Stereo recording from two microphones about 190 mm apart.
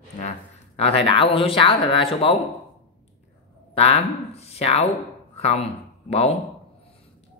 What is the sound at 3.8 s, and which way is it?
Speech, 30° left (ahead or behind).